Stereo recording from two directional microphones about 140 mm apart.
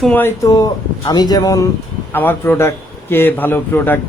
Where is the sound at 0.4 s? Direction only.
25° left (ahead or behind).